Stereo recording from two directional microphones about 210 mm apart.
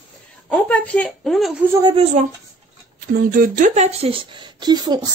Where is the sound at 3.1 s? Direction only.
40° right (ahead or behind).